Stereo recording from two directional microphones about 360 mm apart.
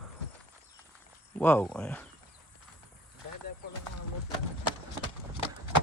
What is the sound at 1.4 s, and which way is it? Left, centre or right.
Speech, centre.